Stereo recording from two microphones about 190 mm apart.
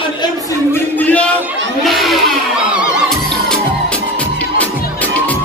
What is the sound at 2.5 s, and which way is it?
Music, centre (ahead or behind).